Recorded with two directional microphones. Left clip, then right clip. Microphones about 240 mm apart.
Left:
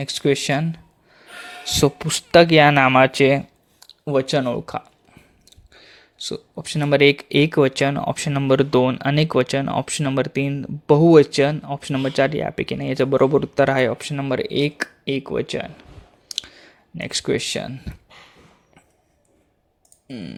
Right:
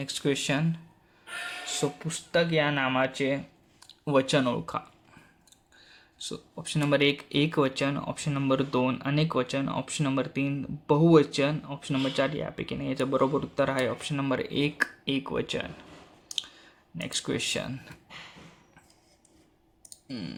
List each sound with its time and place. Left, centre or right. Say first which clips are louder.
0.0 s speech: left 9 dB; left
1.8 s speech: left 15 dB; left
3.8 s speech: left 4 dB; centre
16.3 s clicking: left 5 dB; left
20.1 s clicking: left 4 dB; centre